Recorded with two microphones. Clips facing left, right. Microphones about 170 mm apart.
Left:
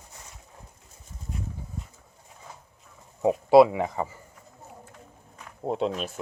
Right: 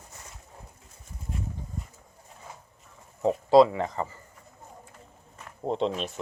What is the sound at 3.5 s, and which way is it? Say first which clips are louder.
Speech: left 2 dB; 10° left (ahead or behind).